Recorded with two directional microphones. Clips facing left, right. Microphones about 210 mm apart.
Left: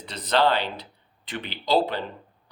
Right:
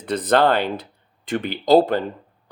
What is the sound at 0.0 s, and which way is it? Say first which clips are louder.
Speech: right 5 dB; 55° right (ahead or behind).